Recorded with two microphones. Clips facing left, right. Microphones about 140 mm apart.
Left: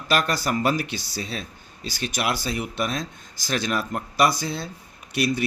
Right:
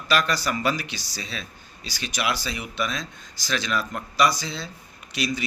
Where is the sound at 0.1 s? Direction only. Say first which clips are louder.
Left 1 dB; 50° left (ahead or behind).